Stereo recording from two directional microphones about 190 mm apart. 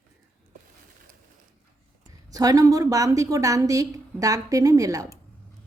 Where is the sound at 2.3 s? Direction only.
20° right (ahead or behind).